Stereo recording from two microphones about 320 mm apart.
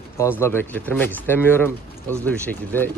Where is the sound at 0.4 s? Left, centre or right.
Centre.